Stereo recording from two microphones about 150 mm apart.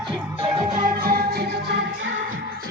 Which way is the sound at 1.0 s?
90° right.